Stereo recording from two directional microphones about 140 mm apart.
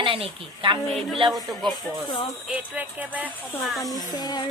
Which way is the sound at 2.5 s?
10° right (ahead or behind).